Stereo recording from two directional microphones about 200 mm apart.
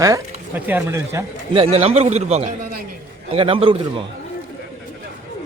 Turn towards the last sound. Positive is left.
turn(degrees=-25)  # may be behind; listen again after turning